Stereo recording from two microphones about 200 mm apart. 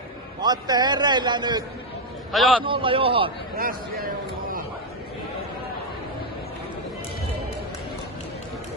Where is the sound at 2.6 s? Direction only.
25° right (ahead or behind).